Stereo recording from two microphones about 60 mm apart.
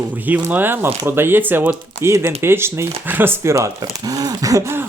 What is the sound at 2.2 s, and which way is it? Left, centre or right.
Speech, right.